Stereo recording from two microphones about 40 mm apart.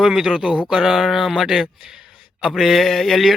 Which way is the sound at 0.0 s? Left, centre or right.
Centre.